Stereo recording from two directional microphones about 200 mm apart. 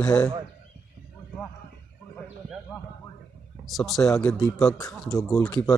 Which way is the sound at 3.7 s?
Centre (ahead or behind).